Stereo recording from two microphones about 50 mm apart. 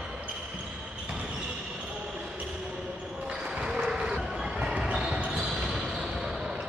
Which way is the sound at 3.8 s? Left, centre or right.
Centre.